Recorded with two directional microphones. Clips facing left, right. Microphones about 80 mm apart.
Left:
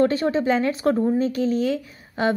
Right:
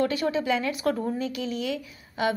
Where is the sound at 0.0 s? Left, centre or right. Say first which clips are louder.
Left 6 dB; left.